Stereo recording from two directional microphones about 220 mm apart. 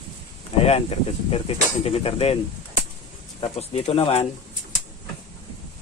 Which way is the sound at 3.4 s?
25° left (ahead or behind).